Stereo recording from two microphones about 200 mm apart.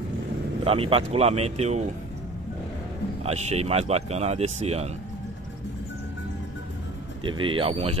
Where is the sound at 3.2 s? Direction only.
30° right (ahead or behind).